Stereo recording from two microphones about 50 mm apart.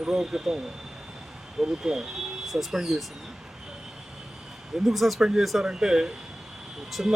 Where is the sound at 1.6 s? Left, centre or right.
Centre.